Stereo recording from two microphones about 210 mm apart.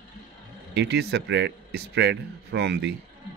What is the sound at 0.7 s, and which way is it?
Speech, 55° right (ahead or behind).